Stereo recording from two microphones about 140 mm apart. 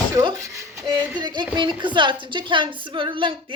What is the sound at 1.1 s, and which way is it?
Speech, 30° right (ahead or behind).